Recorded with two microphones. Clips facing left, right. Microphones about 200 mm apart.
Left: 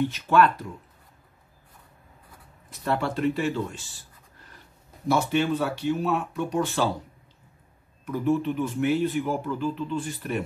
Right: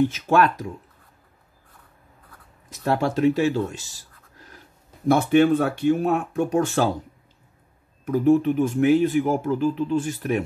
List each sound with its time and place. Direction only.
0.0 s speech: 45° right (ahead or behind)
2.7 s speech: 40° right (ahead or behind)
5.0 s speech: 55° right (ahead or behind)
8.0 s speech: 45° right (ahead or behind)